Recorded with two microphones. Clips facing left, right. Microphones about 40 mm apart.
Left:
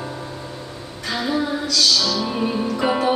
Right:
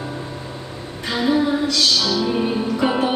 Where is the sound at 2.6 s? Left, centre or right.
Centre.